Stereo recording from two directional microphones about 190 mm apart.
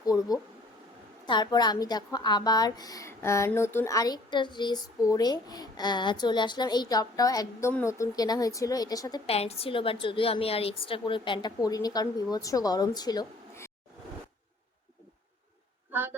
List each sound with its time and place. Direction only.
0.0 s a woman's voice: 20° left (ahead or behind)
9.3 s a woman's voice: 30° left (ahead or behind)
15.9 s a sound: 10° right (ahead or behind)